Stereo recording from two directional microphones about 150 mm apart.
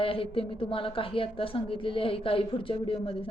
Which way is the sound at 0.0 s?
35° left (ahead or behind).